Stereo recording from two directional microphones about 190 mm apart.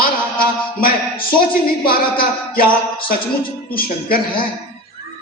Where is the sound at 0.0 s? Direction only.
50° left (ahead or behind).